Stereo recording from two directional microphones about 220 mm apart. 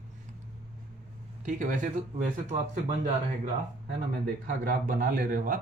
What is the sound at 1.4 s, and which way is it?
Speech, 35° right (ahead or behind).